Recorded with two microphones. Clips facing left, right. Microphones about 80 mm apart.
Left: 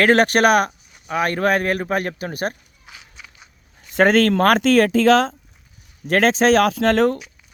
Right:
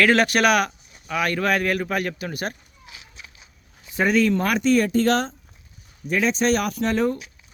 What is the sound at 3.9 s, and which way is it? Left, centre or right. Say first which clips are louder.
Speech: left 5 dB; left.